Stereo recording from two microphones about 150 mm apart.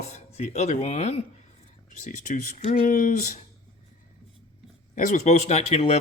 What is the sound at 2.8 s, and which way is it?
Speech, 65° left (ahead or behind).